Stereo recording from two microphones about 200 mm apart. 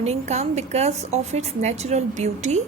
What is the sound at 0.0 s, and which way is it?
A woman's voice, 35° right (ahead or behind).